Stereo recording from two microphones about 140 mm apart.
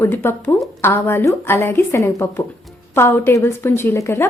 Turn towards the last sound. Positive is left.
turn(degrees=20)  # may be behind; listen again after turning